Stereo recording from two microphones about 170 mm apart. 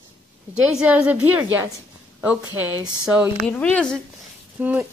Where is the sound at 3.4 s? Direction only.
10° left (ahead or behind).